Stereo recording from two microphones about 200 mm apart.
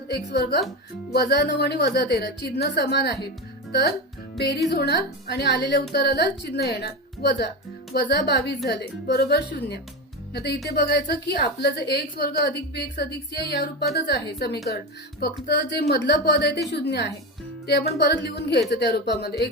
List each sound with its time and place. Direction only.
0.1 s a woman's voice: 55° left (ahead or behind)